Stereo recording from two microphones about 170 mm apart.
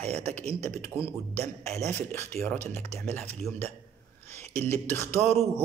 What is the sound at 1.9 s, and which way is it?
Speech, 15° left (ahead or behind).